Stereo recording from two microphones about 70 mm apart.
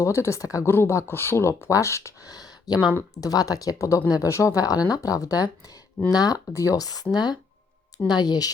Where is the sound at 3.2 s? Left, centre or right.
Left.